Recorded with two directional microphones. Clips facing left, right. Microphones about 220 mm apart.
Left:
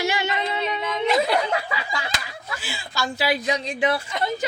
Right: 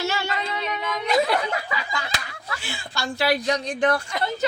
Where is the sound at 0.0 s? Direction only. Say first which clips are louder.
Left 2 dB; 15° left (ahead or behind).